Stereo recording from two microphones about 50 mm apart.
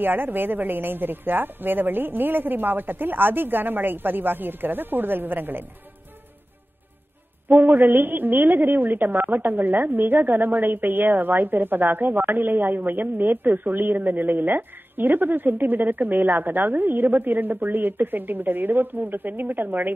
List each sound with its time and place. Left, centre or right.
0.0 s a woman's voice: right
7.4 s a woman's voice: right